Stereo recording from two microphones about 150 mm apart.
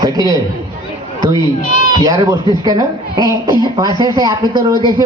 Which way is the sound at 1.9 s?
30° right (ahead or behind).